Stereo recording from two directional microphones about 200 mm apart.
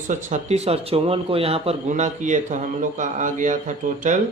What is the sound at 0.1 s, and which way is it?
Speech, 35° right (ahead or behind).